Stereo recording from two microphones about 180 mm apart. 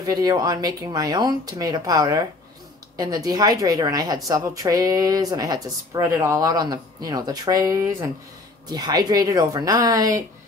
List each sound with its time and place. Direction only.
0.0 s a woman's voice: 20° right (ahead or behind)